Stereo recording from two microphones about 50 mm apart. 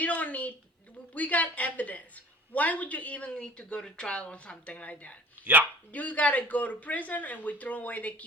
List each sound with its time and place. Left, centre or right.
0.0 s a sound: left
1.1 s speech: left
5.5 s speech: right
5.9 s speech: left